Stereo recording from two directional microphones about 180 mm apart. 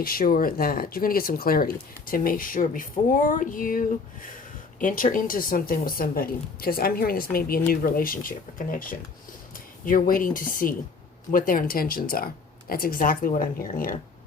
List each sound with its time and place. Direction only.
0.0 s speech: 55° left (ahead or behind)